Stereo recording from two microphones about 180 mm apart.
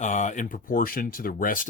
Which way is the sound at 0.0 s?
40° left (ahead or behind).